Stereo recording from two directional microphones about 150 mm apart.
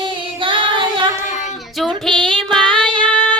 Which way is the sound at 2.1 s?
35° right (ahead or behind).